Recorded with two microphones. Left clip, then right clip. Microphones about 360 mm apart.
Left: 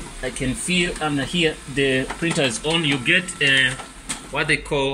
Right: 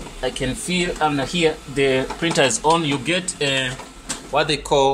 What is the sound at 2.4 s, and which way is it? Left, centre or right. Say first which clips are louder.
Speech: right 2 dB; centre.